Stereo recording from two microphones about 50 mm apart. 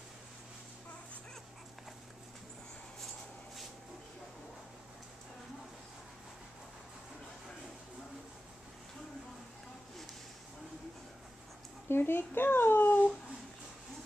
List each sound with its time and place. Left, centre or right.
11.9 s a child's voice: left